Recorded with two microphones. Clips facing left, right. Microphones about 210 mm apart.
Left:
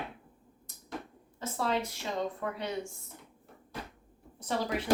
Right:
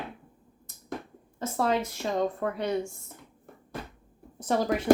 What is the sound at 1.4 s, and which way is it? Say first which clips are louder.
Speech: right 5 dB; 50° right (ahead or behind).